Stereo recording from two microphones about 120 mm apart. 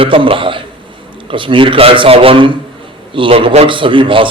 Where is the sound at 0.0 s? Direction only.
45° right (ahead or behind).